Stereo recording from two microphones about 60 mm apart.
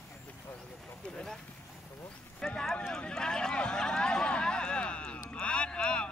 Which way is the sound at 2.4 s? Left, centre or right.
Centre.